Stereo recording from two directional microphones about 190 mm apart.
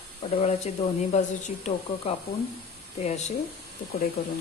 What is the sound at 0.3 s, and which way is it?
Speech, 30° left (ahead or behind).